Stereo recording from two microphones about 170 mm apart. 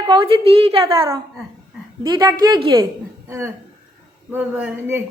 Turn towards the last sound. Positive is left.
turn(degrees=-10)  # may be behind; listen again after turning